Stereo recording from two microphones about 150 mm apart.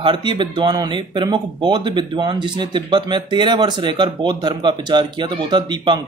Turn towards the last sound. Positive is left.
turn(degrees=-30)  # may be behind; listen again after turning